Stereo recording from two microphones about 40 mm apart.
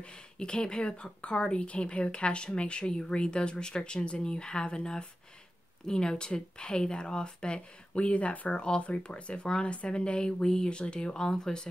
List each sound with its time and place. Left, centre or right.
0.0 s a woman's voice: left